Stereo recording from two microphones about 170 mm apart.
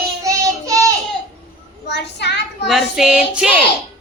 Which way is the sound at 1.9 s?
85° left.